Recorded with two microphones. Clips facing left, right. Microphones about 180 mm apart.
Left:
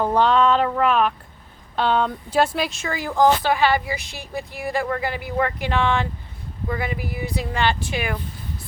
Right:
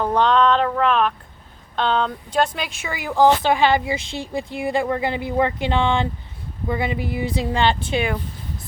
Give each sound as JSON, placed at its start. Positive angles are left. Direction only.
{"t": 0.0, "sound": "a sound", "side_deg": 5}
{"t": 1.7, "sound": "speech", "side_deg": 5}
{"t": 3.4, "sound": "a woman's voice", "side_deg": -25}